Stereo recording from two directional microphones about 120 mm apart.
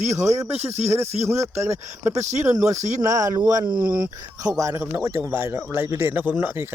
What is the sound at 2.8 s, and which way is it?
Speech, 85° right.